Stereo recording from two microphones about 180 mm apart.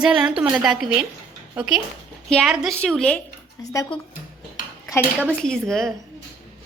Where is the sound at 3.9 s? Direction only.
30° left (ahead or behind).